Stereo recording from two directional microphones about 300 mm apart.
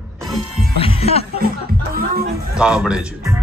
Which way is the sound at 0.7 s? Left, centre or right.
Centre.